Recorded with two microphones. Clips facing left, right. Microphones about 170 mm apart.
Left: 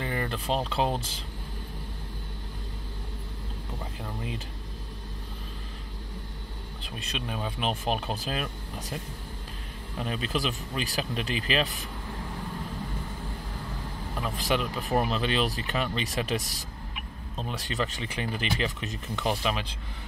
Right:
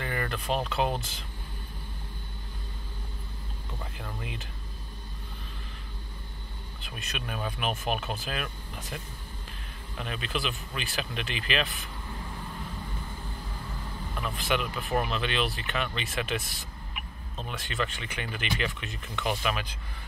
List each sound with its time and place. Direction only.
0.0 s speech: 25° left (ahead or behind)
6.8 s speech: 30° left (ahead or behind)
9.9 s speech: 35° left (ahead or behind)
14.3 s speech: 35° left (ahead or behind)